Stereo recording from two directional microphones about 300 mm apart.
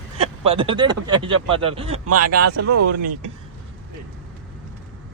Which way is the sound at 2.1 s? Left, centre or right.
Right.